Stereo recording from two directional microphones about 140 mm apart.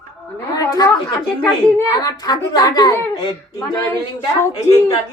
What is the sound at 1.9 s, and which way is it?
A woman's voice, 30° left (ahead or behind).